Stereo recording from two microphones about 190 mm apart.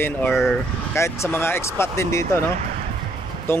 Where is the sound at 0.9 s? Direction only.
15° left (ahead or behind).